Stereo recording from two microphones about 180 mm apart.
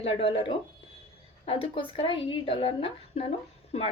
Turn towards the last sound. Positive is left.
turn(degrees=35)  # may be behind; listen again after turning